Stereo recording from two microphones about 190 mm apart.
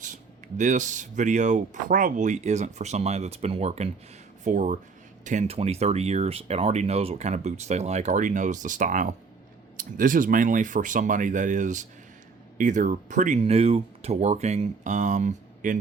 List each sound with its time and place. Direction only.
0.0 s speech: 40° right (ahead or behind)